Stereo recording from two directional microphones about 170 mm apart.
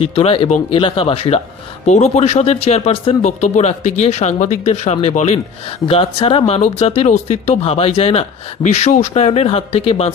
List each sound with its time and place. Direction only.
0.1 s speech: 35° left (ahead or behind)